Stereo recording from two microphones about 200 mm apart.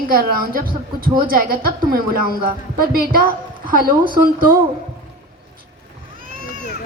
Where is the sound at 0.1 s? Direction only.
45° right (ahead or behind).